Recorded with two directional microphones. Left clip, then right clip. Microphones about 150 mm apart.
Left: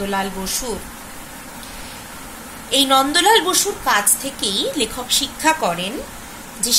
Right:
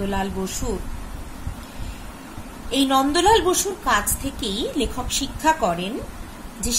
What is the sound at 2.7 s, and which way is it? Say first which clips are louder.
A woman's voice: left 4 dB; 50° right (ahead or behind).